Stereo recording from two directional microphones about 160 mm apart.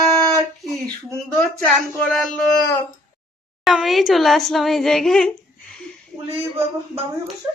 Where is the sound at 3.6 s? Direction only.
Centre (ahead or behind).